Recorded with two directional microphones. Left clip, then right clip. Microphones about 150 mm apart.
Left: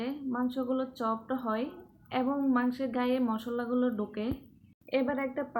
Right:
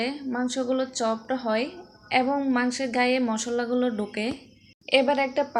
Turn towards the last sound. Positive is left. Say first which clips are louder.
# right 9 dB
turn(degrees=-20)  # may be behind; listen again after turning